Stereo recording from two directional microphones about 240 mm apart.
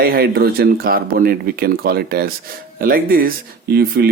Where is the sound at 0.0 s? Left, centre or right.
Right.